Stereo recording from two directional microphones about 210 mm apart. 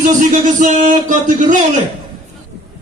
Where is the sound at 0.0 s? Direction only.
35° right (ahead or behind).